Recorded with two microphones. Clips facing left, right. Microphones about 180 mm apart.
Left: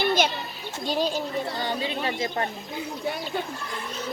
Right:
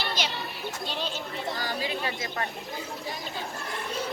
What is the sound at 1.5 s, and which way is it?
Speech, 25° left (ahead or behind).